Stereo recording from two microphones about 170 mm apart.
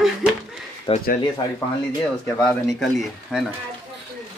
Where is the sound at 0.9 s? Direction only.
30° left (ahead or behind).